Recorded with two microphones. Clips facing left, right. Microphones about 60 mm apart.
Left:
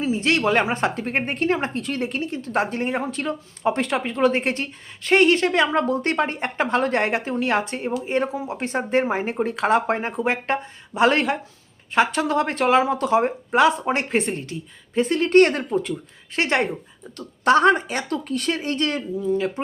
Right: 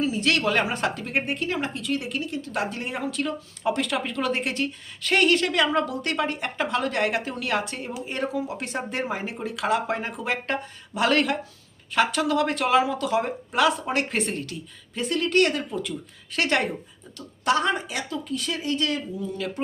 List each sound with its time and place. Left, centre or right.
0.0 s speech: left
17.2 s speech: left